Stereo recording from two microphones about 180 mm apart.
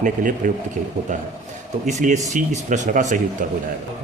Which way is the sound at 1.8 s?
40° right (ahead or behind).